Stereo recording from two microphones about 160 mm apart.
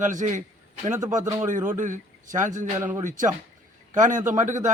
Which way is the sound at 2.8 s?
15° right (ahead or behind).